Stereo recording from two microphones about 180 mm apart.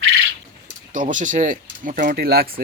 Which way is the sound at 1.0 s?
45° right (ahead or behind).